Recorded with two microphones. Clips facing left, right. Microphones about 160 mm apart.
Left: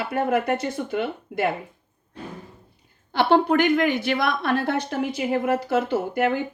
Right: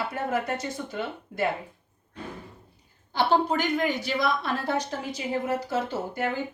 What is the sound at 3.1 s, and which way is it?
A woman's voice, 65° left (ahead or behind).